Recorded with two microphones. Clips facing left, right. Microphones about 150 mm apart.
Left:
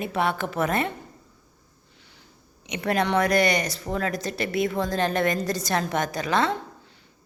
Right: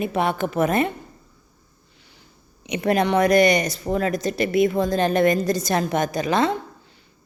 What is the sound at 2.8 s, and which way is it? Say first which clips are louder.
A woman's voice: right 4 dB; 20° right (ahead or behind).